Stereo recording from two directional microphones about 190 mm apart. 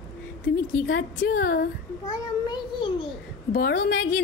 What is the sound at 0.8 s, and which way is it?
Speech, 75° left (ahead or behind).